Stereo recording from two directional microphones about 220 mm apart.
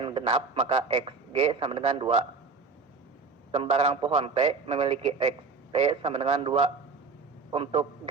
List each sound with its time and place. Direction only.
0.0 s a man's voice: 25° right (ahead or behind)
3.5 s a man's voice: 30° right (ahead or behind)